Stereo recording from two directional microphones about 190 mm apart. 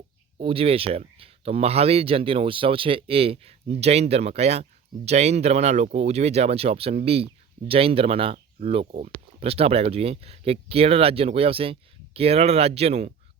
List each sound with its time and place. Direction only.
0.3 s speech: 30° right (ahead or behind)